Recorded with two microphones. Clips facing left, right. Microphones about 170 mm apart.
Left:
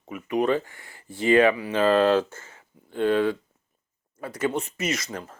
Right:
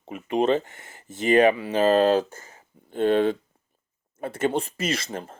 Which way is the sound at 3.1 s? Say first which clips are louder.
Right 2 dB; 25° right (ahead or behind).